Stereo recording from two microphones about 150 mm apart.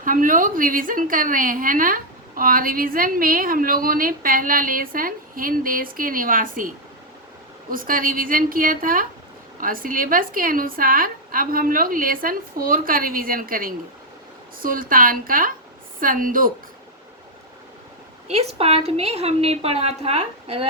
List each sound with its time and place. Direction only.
0.0 s a woman's voice: 65° right (ahead or behind)
18.3 s a woman's voice: 45° right (ahead or behind)